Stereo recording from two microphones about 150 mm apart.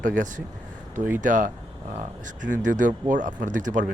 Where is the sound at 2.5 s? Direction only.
60° right (ahead or behind).